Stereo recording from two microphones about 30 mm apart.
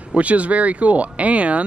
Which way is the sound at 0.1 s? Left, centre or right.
Right.